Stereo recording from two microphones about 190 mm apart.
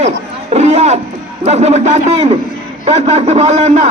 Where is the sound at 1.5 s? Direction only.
35° right (ahead or behind).